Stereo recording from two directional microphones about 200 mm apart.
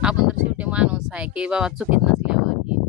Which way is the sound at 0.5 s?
5° right (ahead or behind).